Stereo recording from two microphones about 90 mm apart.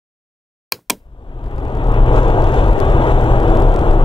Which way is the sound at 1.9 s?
70° left (ahead or behind).